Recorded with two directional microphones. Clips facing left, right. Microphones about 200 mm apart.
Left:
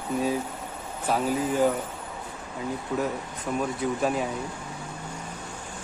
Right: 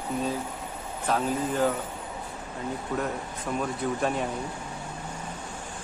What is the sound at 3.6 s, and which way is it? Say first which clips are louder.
Speech: left 2 dB; 5° left (ahead or behind).